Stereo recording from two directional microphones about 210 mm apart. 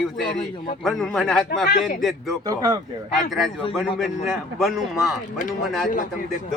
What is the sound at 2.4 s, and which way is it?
Speech, 15° right (ahead or behind).